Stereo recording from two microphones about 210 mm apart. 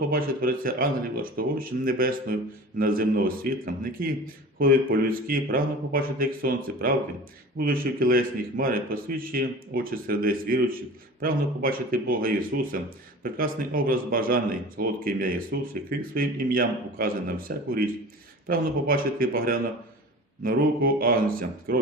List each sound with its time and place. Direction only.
0.1 s speech: 45° right (ahead or behind)